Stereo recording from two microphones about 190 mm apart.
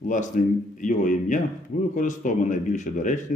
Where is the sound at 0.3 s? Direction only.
40° left (ahead or behind).